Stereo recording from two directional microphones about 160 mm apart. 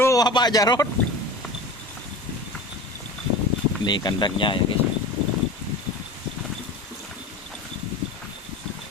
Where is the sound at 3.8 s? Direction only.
30° left (ahead or behind).